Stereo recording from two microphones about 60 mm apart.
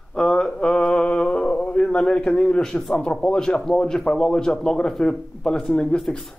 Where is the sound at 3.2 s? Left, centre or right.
Centre.